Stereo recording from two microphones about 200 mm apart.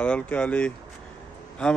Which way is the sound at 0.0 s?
5° left (ahead or behind).